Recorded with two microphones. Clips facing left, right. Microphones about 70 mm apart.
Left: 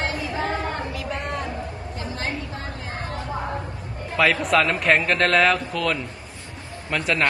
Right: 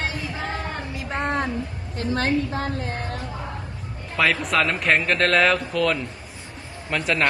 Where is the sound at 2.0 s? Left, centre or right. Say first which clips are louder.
Right 9 dB; right.